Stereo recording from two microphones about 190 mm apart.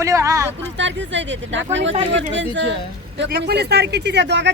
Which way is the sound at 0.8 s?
75° right (ahead or behind).